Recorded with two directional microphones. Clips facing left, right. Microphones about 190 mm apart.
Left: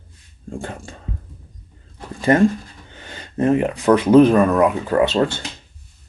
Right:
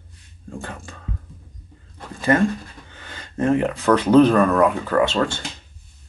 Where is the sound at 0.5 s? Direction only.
30° left (ahead or behind).